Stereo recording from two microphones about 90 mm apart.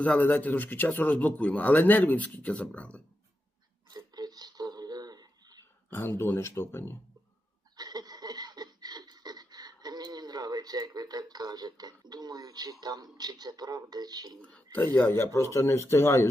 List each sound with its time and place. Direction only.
0.0 s speech: 20° left (ahead or behind)
3.8 s a sound: 50° right (ahead or behind)
6.0 s speech: 25° left (ahead or behind)
7.8 s a sound: 50° right (ahead or behind)
12.8 s speech: 50° right (ahead or behind)
14.4 s speech: 15° left (ahead or behind)
14.9 s speech: 25° left (ahead or behind)